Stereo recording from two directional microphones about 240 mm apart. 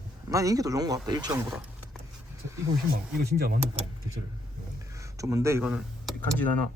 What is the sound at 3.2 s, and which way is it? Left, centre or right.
Speech, right.